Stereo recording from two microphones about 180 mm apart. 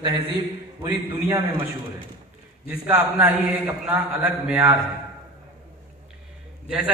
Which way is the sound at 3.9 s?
5° right (ahead or behind).